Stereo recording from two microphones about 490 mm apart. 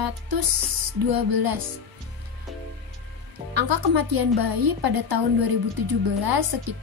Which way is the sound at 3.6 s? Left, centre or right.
Right.